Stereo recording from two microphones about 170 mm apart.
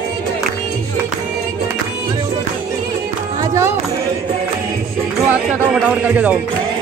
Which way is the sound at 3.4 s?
15° right (ahead or behind).